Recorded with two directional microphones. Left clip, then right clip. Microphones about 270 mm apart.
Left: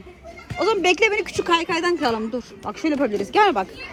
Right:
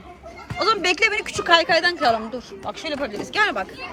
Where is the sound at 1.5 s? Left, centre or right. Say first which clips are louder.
Right 8 dB; right.